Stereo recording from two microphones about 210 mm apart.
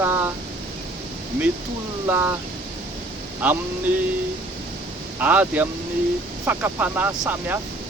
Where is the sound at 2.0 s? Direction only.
10° right (ahead or behind).